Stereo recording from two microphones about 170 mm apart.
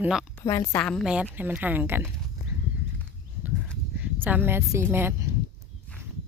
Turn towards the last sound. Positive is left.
turn(degrees=-15)  # may be behind; listen again after turning